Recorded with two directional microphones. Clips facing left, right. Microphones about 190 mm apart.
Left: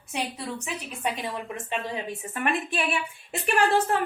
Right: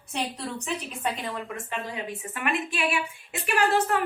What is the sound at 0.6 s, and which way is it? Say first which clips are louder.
Speech: right 2 dB; 10° left (ahead or behind).